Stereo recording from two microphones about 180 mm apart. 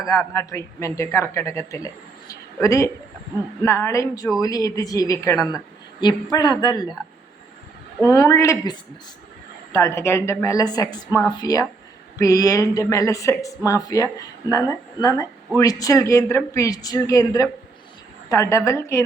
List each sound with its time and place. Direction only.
0.2 s a woman's voice: 15° left (ahead or behind)
8.1 s a woman's voice: 20° left (ahead or behind)